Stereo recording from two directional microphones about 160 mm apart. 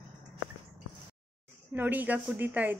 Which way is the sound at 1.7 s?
10° right (ahead or behind).